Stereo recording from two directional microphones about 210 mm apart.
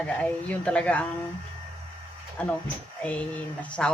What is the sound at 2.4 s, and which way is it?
Speech, 5° left (ahead or behind).